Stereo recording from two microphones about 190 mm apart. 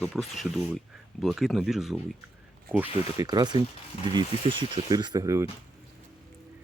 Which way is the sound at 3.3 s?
20° right (ahead or behind).